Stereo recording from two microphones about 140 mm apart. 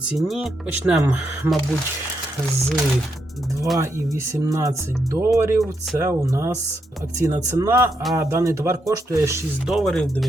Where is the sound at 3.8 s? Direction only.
20° right (ahead or behind).